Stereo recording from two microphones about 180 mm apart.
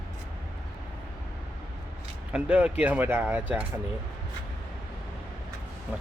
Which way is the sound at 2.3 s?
5° right (ahead or behind).